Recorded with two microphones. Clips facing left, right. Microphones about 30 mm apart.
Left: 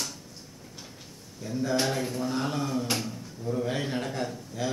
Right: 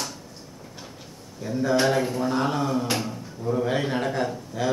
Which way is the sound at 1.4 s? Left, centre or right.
Centre.